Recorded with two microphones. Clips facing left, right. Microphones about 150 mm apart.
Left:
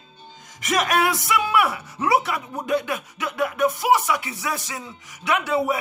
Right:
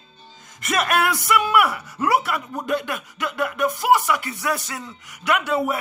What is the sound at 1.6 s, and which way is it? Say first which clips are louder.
Speech: right 1 dB; 25° left (ahead or behind).